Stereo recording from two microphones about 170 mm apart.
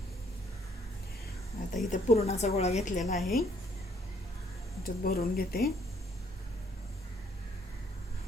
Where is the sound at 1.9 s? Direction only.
40° left (ahead or behind).